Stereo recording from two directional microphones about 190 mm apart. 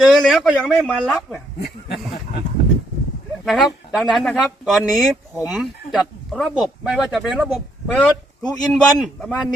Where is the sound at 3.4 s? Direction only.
Centre (ahead or behind).